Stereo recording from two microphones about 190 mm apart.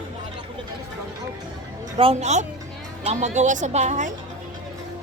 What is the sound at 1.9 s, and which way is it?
A woman's voice, 30° right (ahead or behind).